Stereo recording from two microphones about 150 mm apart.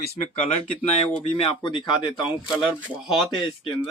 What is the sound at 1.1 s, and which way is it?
Speech, 35° left (ahead or behind).